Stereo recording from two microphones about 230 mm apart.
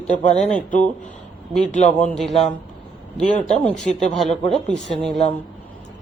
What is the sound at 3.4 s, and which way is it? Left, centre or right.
Speech, centre.